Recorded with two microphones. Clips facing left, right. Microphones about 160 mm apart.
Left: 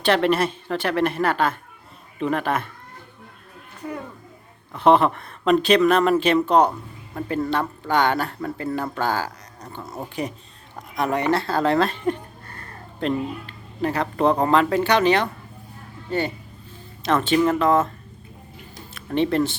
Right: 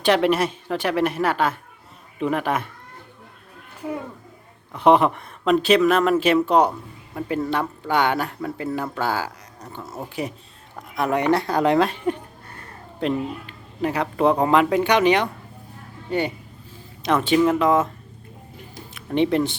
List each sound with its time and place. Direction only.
0.0 s speech: 10° right (ahead or behind)
4.7 s speech: 10° right (ahead or behind)
18.9 s speech: 15° right (ahead or behind)